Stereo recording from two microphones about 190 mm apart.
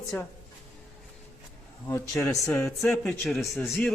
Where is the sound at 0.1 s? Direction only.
10° left (ahead or behind).